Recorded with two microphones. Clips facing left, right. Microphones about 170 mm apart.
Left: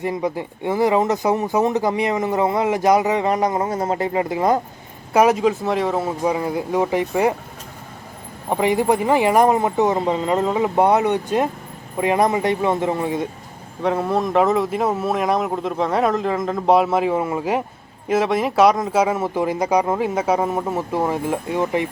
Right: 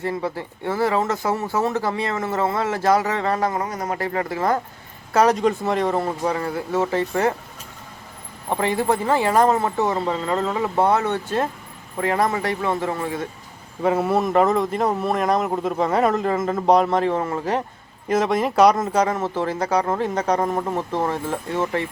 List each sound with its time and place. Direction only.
0.0 s speech: 15° left (ahead or behind)
8.4 s speech: 15° left (ahead or behind)
13.8 s speech: 5° right (ahead or behind); by 21.8 s 15° left (ahead or behind)